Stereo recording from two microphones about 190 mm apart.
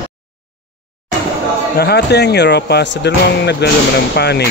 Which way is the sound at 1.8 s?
60° left (ahead or behind).